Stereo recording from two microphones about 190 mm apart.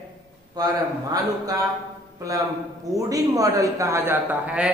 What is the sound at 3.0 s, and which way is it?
A man's voice, 20° right (ahead or behind).